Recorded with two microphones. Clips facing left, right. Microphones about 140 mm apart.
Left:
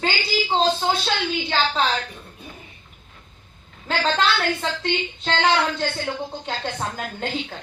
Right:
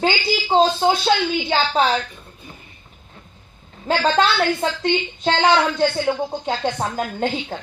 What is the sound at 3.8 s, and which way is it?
A woman's voice, 45° right (ahead or behind).